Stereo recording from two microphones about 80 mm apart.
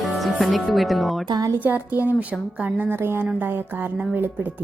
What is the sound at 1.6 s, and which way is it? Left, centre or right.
A woman's voice, right.